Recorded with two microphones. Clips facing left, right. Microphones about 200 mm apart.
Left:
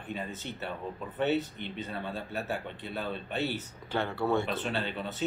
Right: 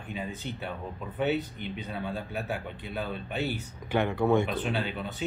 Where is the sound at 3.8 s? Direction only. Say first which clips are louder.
Right 5 dB; 15° right (ahead or behind).